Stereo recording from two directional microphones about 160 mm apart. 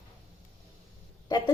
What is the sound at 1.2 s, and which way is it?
Speech, 25° left (ahead or behind).